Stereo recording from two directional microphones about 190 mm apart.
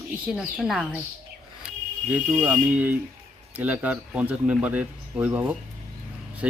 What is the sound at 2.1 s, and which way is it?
A woman's voice, 5° right (ahead or behind).